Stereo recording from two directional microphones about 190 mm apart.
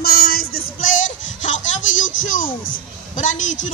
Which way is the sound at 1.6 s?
90° left.